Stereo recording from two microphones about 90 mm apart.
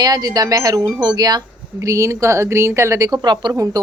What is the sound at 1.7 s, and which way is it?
Speech, 35° right (ahead or behind).